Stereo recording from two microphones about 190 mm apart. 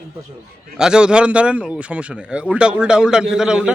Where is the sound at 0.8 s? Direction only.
5° right (ahead or behind).